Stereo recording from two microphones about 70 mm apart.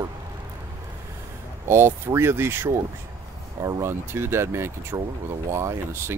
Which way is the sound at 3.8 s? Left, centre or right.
Right.